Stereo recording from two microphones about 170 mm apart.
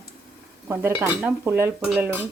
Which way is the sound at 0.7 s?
15° right (ahead or behind).